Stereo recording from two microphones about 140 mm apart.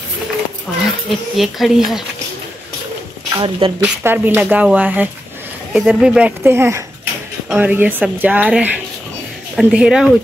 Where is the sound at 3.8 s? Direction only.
15° right (ahead or behind).